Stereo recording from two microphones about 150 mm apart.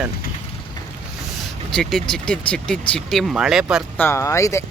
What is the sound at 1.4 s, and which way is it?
Speech, 5° left (ahead or behind).